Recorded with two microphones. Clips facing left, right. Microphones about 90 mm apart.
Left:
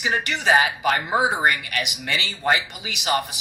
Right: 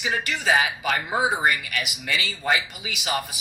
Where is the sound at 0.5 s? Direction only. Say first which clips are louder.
Left 4 dB; 45° left (ahead or behind).